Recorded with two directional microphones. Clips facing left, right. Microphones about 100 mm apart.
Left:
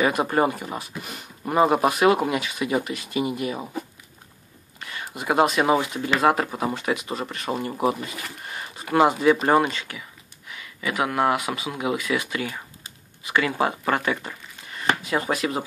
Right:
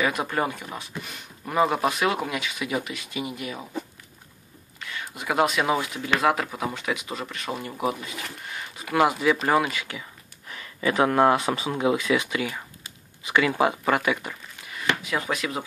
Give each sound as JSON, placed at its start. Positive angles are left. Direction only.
{"t": 0.0, "sound": "speech", "side_deg": 0}
{"t": 5.0, "sound": "speech", "side_deg": 5}
{"t": 10.5, "sound": "speech", "side_deg": -35}
{"t": 14.9, "sound": "a sound", "side_deg": 40}
{"t": 15.3, "sound": "speech", "side_deg": 0}